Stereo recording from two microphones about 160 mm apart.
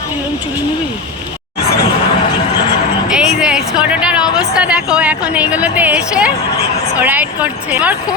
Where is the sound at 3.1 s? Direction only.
5° right (ahead or behind).